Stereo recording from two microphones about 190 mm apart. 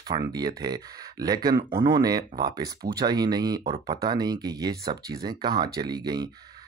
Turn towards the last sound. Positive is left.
turn(degrees=-20)  # may be behind; listen again after turning